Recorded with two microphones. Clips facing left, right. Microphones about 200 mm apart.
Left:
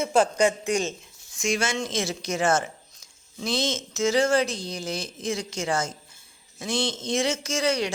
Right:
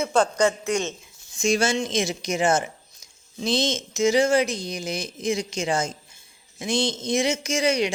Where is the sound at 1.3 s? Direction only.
30° right (ahead or behind).